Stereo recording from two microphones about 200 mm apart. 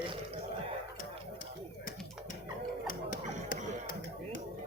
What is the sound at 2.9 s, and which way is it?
Music, 40° left (ahead or behind).